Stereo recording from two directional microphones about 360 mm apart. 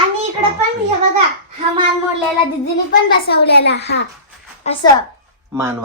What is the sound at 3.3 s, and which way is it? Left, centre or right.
A woman's voice, left.